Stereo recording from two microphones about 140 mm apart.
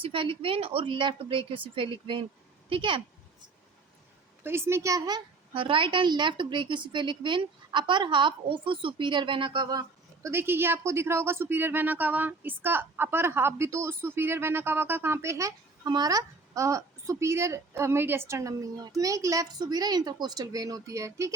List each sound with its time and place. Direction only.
0.0 s a woman's voice: 40° right (ahead or behind)
4.4 s a woman's voice: 20° right (ahead or behind)
10.2 s speech: 15° right (ahead or behind)